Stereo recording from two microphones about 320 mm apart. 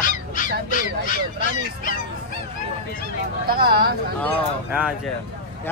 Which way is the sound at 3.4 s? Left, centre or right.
Right.